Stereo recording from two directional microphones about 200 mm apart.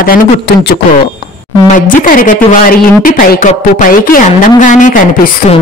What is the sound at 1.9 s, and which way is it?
A woman's voice, 45° left (ahead or behind).